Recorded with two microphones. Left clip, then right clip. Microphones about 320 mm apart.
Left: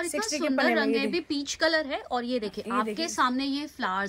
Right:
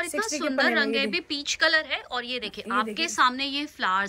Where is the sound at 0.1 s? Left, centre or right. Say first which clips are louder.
Right 1 dB; centre.